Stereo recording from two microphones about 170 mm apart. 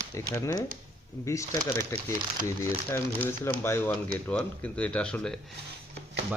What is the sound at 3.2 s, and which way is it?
Speech, 15° left (ahead or behind).